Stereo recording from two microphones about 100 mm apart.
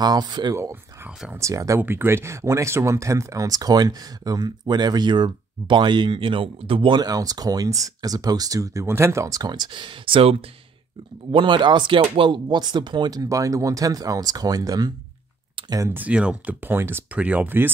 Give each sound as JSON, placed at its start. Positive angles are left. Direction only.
{"t": 0.0, "sound": "speech", "side_deg": -45}
{"t": 1.3, "sound": "speech", "side_deg": -30}
{"t": 1.8, "sound": "speech", "side_deg": -20}
{"t": 7.0, "sound": "speech", "side_deg": -40}
{"t": 11.3, "sound": "speech", "side_deg": -55}
{"t": 15.9, "sound": "speech", "side_deg": -15}